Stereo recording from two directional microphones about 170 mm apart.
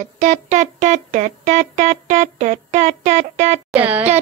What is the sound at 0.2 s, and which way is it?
Music, 45° right (ahead or behind).